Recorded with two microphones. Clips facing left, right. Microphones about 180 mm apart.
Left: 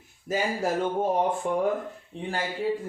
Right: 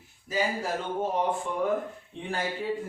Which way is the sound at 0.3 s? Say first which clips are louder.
Left 1 dB; 50° left (ahead or behind).